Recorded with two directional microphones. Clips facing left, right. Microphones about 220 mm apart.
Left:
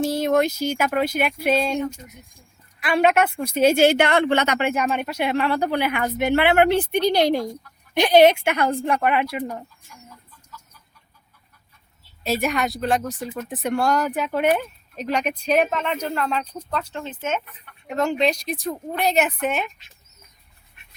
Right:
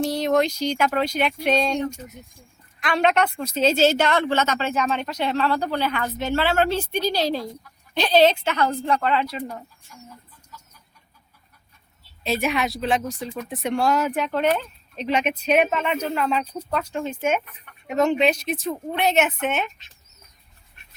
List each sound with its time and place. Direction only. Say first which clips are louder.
0.0 s speech: left 1 dB; 5° left (ahead or behind)
3.9 s a woman's voice: left 2 dB; 60° left (ahead or behind)
4.5 s speech: left 2 dB; 15° left (ahead or behind)
12.2 s speech: left 1 dB; centre (ahead or behind)
18.5 s speech: right 1 dB; 15° left (ahead or behind)
18.9 s speech: even; centre (ahead or behind)